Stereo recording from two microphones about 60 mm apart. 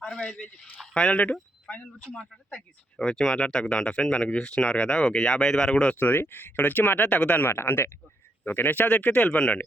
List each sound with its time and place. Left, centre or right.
0.0 s speech: centre
1.7 s a sound: centre
2.1 s speech: centre
6.0 s speech: left
7.5 s speech: left